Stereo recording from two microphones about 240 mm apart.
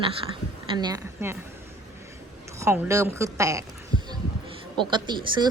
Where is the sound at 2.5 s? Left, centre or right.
Centre.